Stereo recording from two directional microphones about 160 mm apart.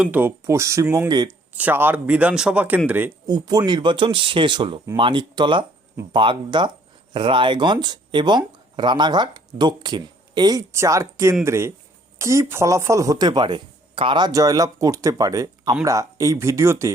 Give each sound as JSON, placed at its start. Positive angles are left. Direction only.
{"t": 0.0, "sound": "speech", "side_deg": -10}
{"t": 1.5, "sound": "speech", "side_deg": -10}
{"t": 3.2, "sound": "speech", "side_deg": -25}